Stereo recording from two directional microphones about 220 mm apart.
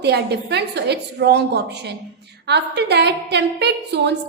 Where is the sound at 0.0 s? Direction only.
50° right (ahead or behind).